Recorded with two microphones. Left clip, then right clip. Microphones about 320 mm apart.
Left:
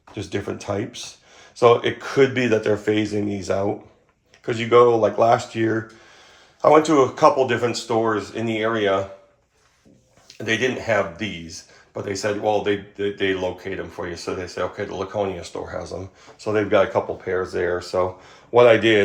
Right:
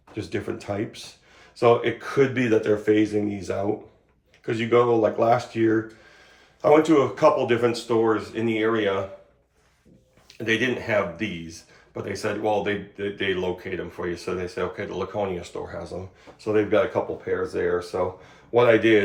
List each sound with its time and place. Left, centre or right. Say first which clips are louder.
0.1 s speech: left 2 dB; centre
10.2 s speech: left 2 dB; centre